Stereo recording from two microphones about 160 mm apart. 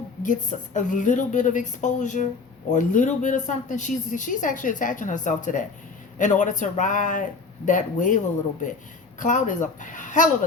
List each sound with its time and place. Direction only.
0.2 s speech: 50° left (ahead or behind)